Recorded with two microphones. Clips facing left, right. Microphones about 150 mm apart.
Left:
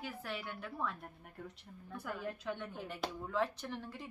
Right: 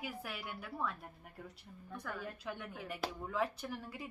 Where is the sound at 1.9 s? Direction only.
5° left (ahead or behind).